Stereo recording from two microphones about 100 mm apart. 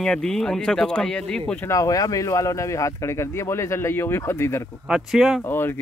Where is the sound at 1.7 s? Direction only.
35° left (ahead or behind).